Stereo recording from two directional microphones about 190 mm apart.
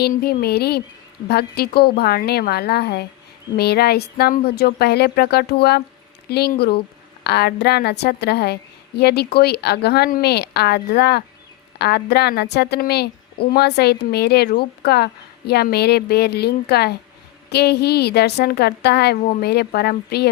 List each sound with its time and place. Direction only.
0.0 s a woman's voice: 55° left (ahead or behind)